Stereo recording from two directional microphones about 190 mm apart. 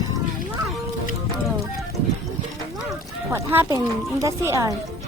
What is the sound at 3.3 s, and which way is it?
Speech, 15° right (ahead or behind).